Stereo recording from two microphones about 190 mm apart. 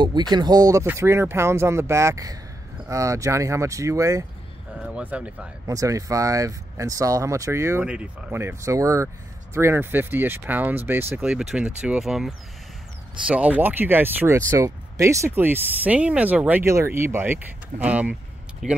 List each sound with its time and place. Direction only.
0.0 s speech: 20° right (ahead or behind); by 18.8 s centre (ahead or behind)